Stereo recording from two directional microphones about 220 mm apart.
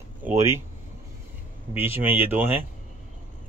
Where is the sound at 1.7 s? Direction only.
10° right (ahead or behind).